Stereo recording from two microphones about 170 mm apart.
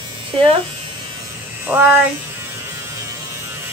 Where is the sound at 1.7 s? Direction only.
10° right (ahead or behind).